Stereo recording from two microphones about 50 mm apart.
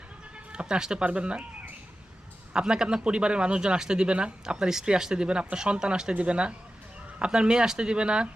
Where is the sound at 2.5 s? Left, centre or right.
Centre.